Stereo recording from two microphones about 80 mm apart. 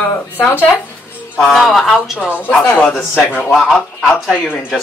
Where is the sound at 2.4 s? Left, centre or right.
Left.